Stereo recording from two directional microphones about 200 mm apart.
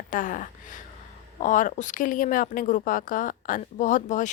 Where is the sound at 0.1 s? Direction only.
40° left (ahead or behind).